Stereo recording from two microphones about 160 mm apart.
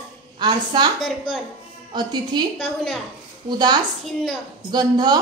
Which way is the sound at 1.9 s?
25° right (ahead or behind).